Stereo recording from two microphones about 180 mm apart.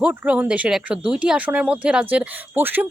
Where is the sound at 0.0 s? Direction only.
10° right (ahead or behind).